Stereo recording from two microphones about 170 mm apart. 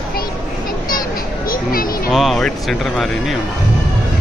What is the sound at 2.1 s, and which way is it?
Speech, centre (ahead or behind).